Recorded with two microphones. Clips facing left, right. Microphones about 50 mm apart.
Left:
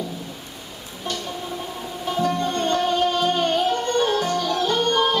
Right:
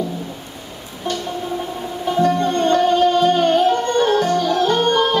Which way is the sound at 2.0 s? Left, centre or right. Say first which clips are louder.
Right 6 dB; centre.